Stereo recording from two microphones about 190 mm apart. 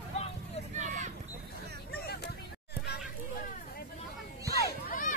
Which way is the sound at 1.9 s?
55° left (ahead or behind).